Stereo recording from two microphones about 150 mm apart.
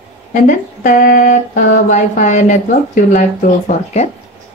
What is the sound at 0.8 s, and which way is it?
Speech, 65° left (ahead or behind).